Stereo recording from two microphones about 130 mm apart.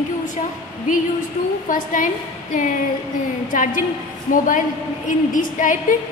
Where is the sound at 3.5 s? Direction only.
90° left.